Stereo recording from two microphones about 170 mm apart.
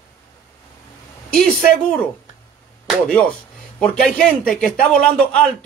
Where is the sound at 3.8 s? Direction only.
5° left (ahead or behind).